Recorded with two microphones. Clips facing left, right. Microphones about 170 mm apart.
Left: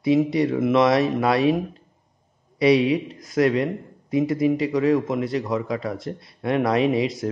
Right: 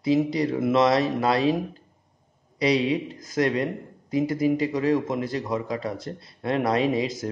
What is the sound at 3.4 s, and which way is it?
Speech, 25° left (ahead or behind).